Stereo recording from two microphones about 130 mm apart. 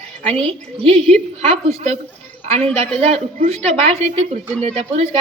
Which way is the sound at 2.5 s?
50° right (ahead or behind).